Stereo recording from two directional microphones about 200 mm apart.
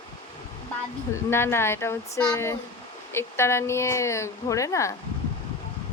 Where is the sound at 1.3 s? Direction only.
10° left (ahead or behind).